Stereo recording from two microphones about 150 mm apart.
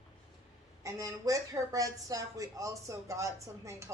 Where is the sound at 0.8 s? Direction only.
20° right (ahead or behind).